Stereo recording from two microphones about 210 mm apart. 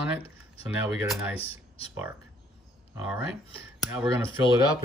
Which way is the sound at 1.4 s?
25° left (ahead or behind).